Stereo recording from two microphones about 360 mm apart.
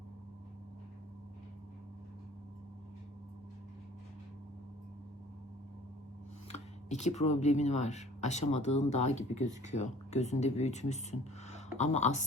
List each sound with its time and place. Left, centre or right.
6.5 s speech: centre